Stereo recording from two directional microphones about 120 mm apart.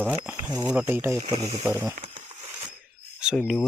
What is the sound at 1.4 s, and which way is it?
Speech, 65° right (ahead or behind).